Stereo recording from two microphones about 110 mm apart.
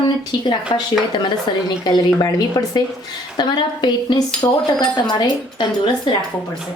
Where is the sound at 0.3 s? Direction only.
40° left (ahead or behind).